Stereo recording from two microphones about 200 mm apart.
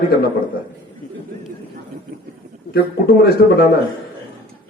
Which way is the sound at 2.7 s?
50° left (ahead or behind).